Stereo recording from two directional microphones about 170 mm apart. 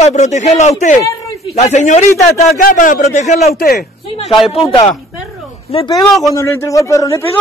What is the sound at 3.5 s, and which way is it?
Speech, 65° left (ahead or behind).